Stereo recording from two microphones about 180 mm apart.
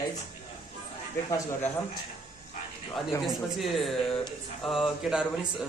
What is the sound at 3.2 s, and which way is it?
A man's voice, centre (ahead or behind).